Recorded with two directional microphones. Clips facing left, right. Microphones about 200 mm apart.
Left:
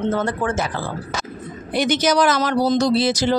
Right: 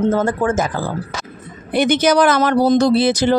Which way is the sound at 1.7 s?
55° right (ahead or behind).